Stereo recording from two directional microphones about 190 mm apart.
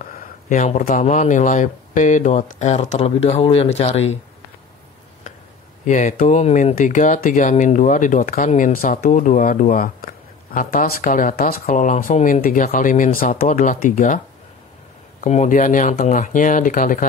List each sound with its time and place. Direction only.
0.0 s speech: 40° left (ahead or behind)
5.9 s speech: 40° left (ahead or behind)